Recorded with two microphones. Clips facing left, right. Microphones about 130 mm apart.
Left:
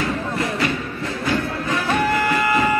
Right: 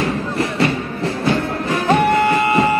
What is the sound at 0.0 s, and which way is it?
Music, 30° right (ahead or behind).